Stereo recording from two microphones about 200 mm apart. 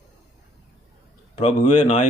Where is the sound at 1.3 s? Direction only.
35° left (ahead or behind).